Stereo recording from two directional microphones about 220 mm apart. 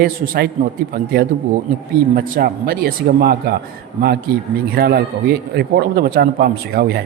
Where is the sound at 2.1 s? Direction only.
40° right (ahead or behind).